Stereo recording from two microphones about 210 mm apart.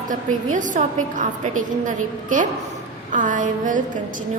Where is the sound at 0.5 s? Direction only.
35° right (ahead or behind).